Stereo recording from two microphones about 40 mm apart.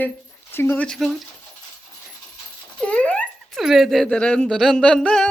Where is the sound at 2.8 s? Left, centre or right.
Left.